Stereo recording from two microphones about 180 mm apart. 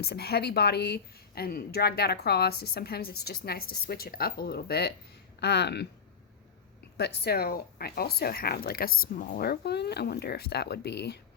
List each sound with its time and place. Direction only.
0.0 s a woman's voice: 60° left (ahead or behind)
6.9 s a woman's voice: 65° left (ahead or behind)